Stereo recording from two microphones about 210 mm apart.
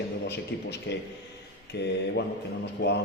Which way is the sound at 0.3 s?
55° left (ahead or behind).